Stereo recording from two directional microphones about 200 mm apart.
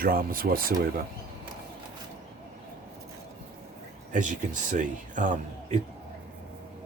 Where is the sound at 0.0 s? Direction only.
45° right (ahead or behind).